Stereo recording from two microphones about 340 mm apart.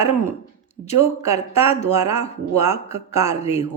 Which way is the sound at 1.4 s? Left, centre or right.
Centre.